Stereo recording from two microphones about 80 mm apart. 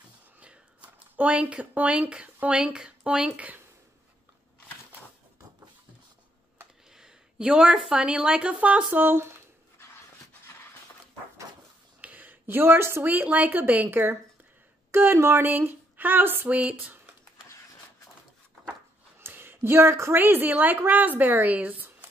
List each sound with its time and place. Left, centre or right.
0.4 s speech: centre
7.0 s speech: centre
8.9 s a woman's voice: right
12.0 s a woman's voice: right
19.2 s a woman's voice: right